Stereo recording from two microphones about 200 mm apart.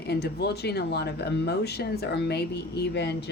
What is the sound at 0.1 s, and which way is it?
Speech, 55° left (ahead or behind).